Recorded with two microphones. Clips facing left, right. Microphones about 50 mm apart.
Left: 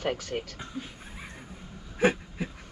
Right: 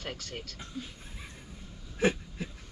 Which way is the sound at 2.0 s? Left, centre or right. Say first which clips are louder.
Left 3 dB; left.